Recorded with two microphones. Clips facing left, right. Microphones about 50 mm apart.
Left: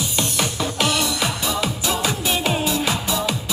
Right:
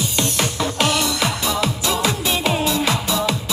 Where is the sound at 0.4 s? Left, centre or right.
Right.